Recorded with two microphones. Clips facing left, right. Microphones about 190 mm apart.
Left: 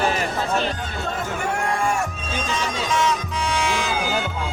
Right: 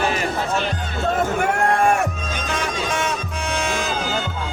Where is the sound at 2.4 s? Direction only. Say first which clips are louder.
Right 1 dB; 55° right (ahead or behind).